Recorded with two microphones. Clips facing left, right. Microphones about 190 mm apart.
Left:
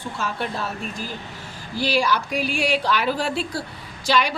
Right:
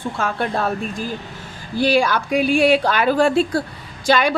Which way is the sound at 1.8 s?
50° right (ahead or behind).